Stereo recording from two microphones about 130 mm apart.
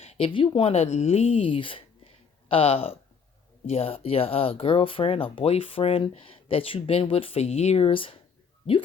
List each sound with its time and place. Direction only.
0.0 s speech: 50° left (ahead or behind)